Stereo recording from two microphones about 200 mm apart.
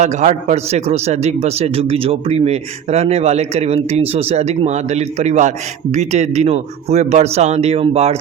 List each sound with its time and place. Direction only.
0.0 s a man's voice: 35° right (ahead or behind)